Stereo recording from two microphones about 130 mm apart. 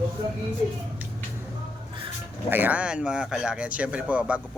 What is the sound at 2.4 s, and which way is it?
Speech, 15° right (ahead or behind).